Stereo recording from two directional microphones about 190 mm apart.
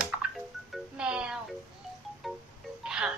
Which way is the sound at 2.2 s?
Centre (ahead or behind).